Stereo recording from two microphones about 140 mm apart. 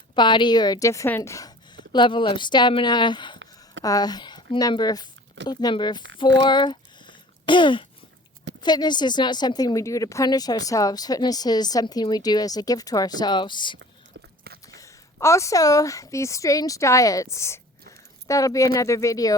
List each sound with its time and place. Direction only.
0.2 s a woman's voice: 35° left (ahead or behind)
14.8 s speech: 20° left (ahead or behind)